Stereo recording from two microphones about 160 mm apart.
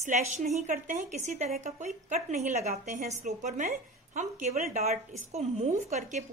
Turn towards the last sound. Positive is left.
turn(degrees=-45)  # may be behind; listen again after turning